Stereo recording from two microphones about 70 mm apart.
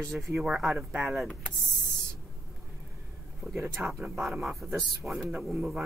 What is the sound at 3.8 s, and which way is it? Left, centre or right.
Speech, centre.